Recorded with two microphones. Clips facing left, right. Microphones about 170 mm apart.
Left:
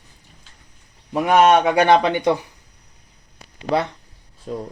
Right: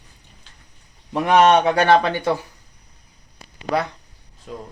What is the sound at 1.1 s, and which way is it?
Speech, 5° left (ahead or behind).